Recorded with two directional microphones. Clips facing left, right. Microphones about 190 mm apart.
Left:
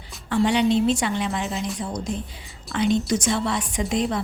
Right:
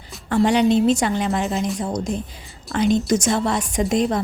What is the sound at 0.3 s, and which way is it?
A woman's voice, 45° right (ahead or behind).